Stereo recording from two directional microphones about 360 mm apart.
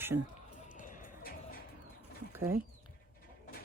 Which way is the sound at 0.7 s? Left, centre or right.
Left.